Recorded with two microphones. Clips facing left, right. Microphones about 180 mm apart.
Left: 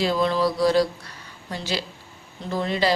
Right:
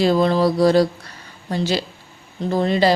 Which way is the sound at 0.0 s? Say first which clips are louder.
Right 5 dB; 45° right (ahead or behind).